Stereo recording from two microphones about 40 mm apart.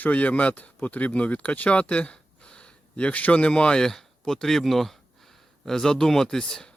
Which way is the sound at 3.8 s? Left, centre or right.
Centre.